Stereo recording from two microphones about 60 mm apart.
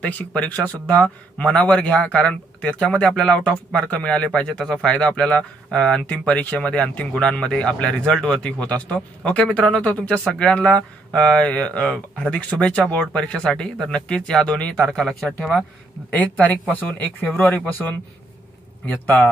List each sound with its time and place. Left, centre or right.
0.3 s speech: left; by 15.5 s centre
16.2 s speech: left
18.9 s speech: left